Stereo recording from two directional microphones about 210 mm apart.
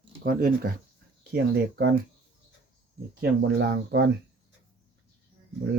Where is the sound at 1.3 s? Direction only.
50° right (ahead or behind).